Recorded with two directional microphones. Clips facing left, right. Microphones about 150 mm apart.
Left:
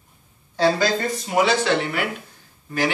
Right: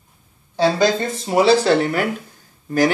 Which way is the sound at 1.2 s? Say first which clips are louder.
Right 6 dB; 35° right (ahead or behind).